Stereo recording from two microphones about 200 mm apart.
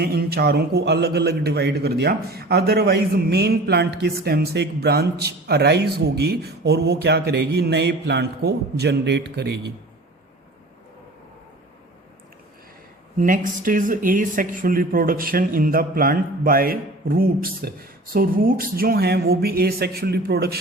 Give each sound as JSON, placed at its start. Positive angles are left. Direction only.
{"t": 0.0, "sound": "a man's voice", "side_deg": -50}
{"t": 13.1, "sound": "speech", "side_deg": -40}